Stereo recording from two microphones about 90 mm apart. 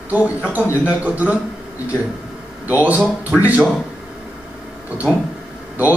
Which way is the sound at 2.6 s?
20° right (ahead or behind).